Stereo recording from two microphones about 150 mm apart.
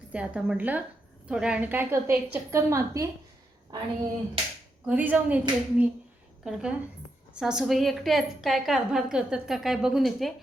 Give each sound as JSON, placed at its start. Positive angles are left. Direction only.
{"t": 0.1, "sound": "a woman's voice", "side_deg": -10}
{"t": 4.9, "sound": "a woman's voice", "side_deg": -10}